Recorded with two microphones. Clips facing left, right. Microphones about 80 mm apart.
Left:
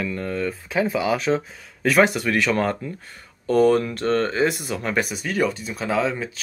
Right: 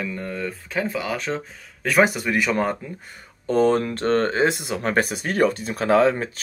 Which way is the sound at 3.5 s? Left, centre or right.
Right.